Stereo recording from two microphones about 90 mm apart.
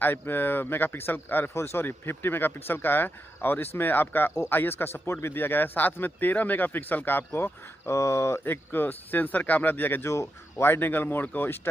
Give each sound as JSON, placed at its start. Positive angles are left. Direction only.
{"t": 0.0, "sound": "speech", "side_deg": 25}